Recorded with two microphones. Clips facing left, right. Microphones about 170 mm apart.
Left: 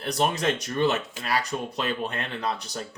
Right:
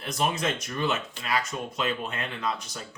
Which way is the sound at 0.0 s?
35° left (ahead or behind).